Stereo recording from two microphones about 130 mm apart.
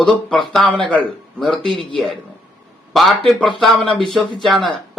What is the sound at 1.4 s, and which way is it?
Speech, 5° left (ahead or behind).